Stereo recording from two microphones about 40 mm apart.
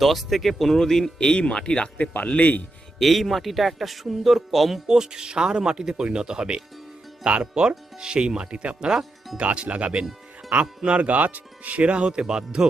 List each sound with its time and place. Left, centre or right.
0.0 s speech: centre
1.6 s speech: left
2.1 s speech: left
3.0 s speech: centre
4.9 s speech: centre